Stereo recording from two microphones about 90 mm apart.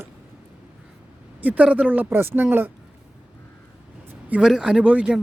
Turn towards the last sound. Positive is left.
turn(degrees=-15)  # may be behind; listen again after turning